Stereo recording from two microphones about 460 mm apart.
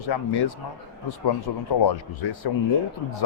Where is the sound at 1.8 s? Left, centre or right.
Left.